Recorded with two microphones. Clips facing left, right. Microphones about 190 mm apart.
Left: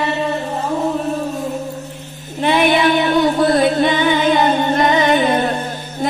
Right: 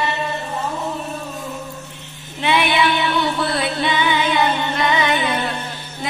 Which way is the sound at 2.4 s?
45° left (ahead or behind).